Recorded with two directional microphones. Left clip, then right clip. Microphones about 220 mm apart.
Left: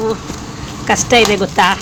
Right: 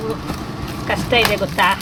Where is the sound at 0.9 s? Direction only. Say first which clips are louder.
Left 5 dB; 45° left (ahead or behind).